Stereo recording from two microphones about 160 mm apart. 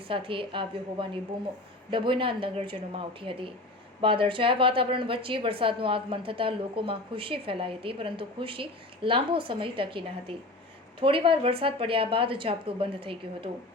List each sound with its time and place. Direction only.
0.1 s a woman's voice: 35° right (ahead or behind)